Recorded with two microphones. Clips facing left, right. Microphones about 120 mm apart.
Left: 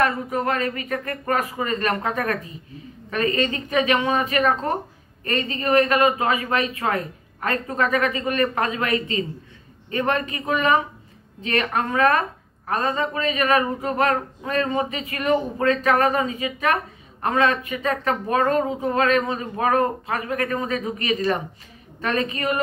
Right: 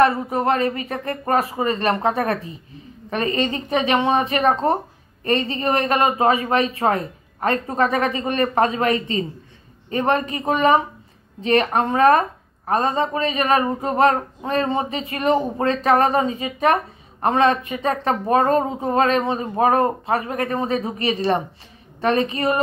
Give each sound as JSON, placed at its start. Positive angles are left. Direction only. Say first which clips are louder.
{"t": 0.0, "sound": "a woman's voice", "louder": "right 5 dB", "side_deg": -35}